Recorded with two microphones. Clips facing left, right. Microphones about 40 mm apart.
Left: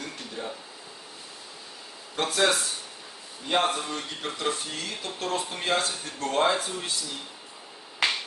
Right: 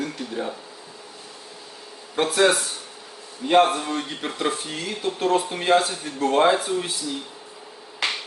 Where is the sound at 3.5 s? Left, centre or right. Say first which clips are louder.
Right 8 dB; right; by 6.9 s centre.